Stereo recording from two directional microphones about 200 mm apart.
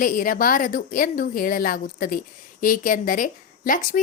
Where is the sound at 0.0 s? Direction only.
45° left (ahead or behind).